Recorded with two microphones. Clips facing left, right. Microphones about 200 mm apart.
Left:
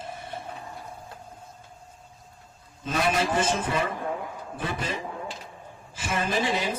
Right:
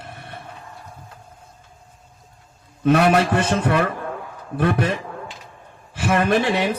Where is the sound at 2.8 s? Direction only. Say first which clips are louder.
Right 10 dB; 65° right (ahead or behind).